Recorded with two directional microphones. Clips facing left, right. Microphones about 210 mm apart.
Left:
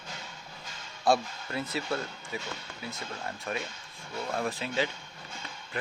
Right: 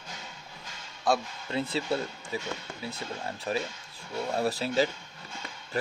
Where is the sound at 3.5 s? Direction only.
35° right (ahead or behind).